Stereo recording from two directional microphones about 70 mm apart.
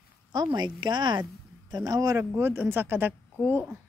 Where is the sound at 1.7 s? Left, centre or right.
Right.